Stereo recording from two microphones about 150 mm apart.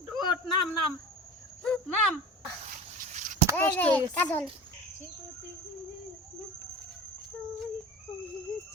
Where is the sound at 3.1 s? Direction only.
55° right (ahead or behind).